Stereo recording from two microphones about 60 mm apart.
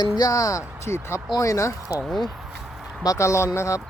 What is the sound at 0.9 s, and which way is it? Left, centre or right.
Speech, left.